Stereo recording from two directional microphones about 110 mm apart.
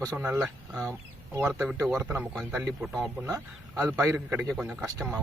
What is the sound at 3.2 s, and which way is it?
A man's voice, 30° right (ahead or behind).